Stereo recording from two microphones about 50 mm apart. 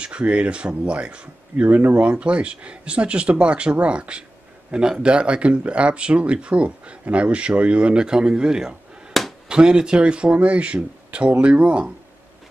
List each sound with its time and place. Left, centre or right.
0.0 s speech: right
1.7 s speech: right
2.0 s speech: right
9.1 s chop: centre
9.5 s speech: centre